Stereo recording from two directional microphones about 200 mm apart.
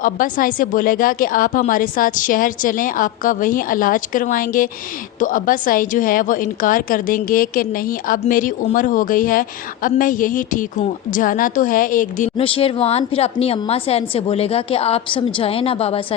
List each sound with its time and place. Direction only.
0.0 s a woman's voice: 45° left (ahead or behind)
12.4 s a woman's voice: 30° left (ahead or behind)